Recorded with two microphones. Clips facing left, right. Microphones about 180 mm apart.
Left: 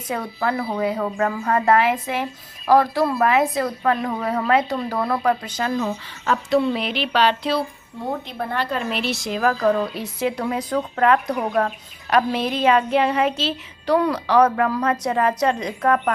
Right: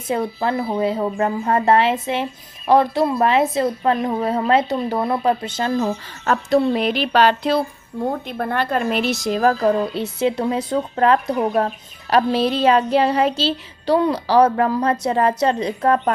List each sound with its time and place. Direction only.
0.1 s a woman's voice: 25° right (ahead or behind); by 6.6 s 45° right (ahead or behind)
6.6 s a sound: 45° right (ahead or behind)
8.3 s child singing: 50° right (ahead or behind); by 16.1 s 30° right (ahead or behind)